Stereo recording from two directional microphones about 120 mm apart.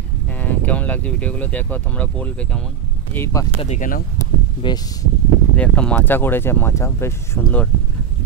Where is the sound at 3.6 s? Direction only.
70° left (ahead or behind).